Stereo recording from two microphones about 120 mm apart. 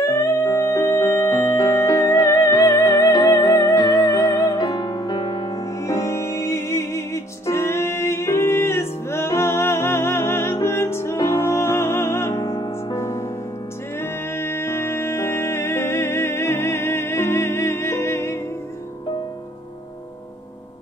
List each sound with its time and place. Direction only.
0.0 s music: 25° left (ahead or behind)
12.4 s music: 35° left (ahead or behind)
12.9 s music: 25° left (ahead or behind)